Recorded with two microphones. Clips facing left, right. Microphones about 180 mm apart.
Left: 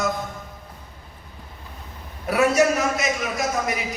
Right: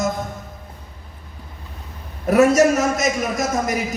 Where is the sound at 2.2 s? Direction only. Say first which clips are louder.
Right 5 dB; 45° right (ahead or behind).